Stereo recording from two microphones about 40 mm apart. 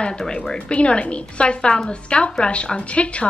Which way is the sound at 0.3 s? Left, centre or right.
Left.